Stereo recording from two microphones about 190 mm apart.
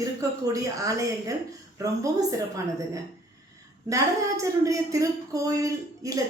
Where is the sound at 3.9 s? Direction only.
15° right (ahead or behind).